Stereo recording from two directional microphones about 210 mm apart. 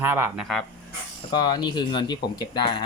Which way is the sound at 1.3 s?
20° left (ahead or behind).